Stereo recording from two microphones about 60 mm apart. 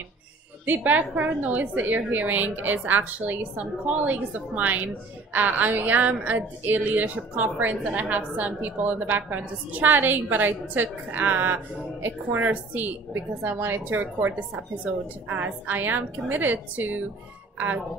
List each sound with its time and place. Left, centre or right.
0.7 s a woman's voice: right